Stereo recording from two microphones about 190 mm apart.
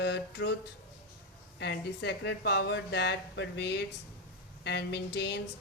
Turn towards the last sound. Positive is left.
turn(degrees=60)  # may be behind; listen again after turning